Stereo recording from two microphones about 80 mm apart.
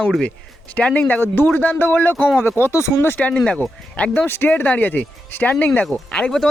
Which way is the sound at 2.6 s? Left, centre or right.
Left.